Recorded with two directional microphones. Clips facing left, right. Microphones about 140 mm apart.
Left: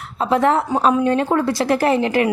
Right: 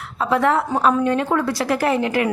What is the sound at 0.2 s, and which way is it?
A woman's voice, 25° left (ahead or behind).